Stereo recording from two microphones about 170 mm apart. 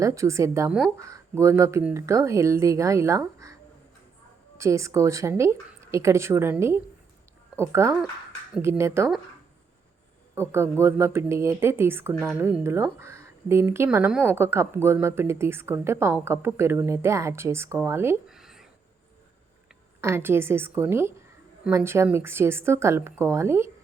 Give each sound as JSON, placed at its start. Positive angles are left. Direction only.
{"t": 0.0, "sound": "speech", "side_deg": -20}
{"t": 8.5, "sound": "speech", "side_deg": -5}
{"t": 10.5, "sound": "speech", "side_deg": -15}
{"t": 18.3, "sound": "a sound", "side_deg": -5}
{"t": 20.0, "sound": "speech", "side_deg": -15}